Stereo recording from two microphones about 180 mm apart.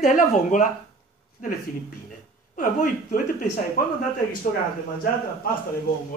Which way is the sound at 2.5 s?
50° left (ahead or behind).